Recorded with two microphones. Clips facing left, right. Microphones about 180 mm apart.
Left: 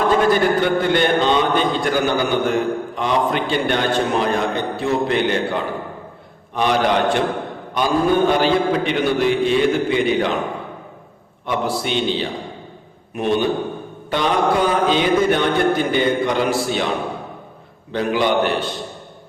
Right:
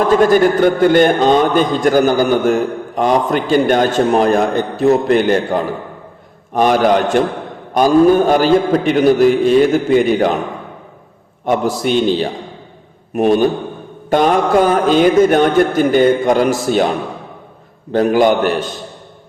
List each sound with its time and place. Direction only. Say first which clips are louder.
0.2 s a man's voice: right 5 dB; 45° right (ahead or behind)
11.4 s a man's voice: right 6 dB; 45° right (ahead or behind)
17.9 s a man's voice: right 6 dB; 45° right (ahead or behind)